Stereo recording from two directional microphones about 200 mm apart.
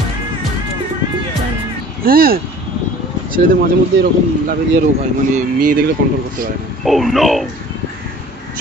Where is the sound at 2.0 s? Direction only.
45° right (ahead or behind).